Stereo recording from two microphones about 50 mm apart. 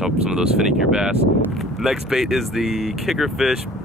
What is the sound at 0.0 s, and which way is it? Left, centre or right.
Speech, centre.